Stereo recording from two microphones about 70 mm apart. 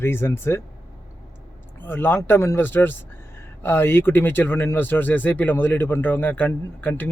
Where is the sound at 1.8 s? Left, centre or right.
Left.